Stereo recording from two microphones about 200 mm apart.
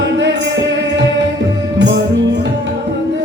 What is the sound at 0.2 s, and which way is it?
Music, 60° right (ahead or behind).